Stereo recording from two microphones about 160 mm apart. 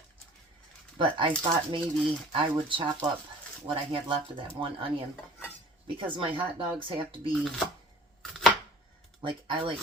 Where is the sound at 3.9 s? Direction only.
35° right (ahead or behind).